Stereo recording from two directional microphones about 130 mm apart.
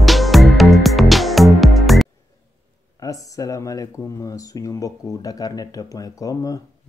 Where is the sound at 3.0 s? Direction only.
25° left (ahead or behind).